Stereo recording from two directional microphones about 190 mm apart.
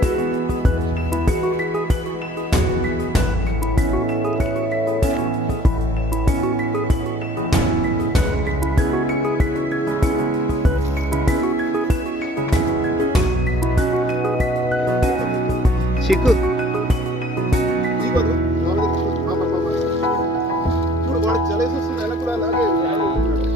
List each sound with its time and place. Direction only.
16.0 s music: centre (ahead or behind)